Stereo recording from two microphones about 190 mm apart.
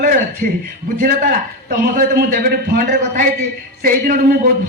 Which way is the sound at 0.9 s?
45° right (ahead or behind).